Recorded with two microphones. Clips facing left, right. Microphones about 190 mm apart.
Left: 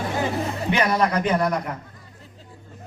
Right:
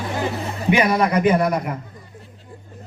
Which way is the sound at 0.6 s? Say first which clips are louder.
Right 4 dB; 10° right (ahead or behind).